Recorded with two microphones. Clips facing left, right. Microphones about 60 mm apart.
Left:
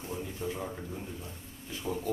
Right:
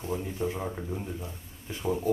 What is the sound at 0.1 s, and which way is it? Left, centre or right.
Speech, right.